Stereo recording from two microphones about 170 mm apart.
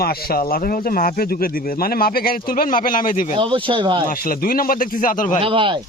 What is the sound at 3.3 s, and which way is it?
Speech, 30° right (ahead or behind).